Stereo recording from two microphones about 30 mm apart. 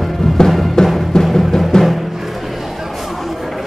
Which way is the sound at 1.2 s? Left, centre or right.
Centre.